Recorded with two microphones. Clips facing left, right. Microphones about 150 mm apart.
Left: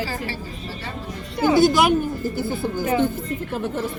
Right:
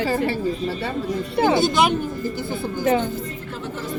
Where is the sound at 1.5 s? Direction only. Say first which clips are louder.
Left 4 dB; 25° right (ahead or behind).